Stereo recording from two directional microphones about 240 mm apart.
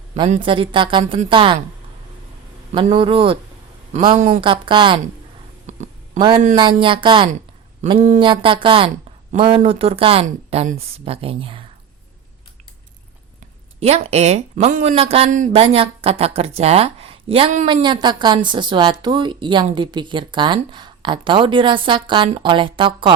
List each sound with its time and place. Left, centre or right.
0.1 s speech: right
2.7 s speech: right
6.1 s speech: centre
13.7 s speech: right